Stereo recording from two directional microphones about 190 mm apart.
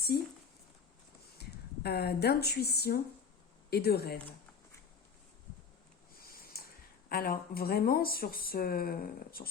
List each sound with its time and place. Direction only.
0.1 s speech: 50° left (ahead or behind)
1.4 s speech: 55° left (ahead or behind)
6.1 s speech: 50° left (ahead or behind)